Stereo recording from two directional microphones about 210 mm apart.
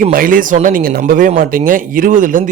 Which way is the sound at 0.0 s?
40° right (ahead or behind).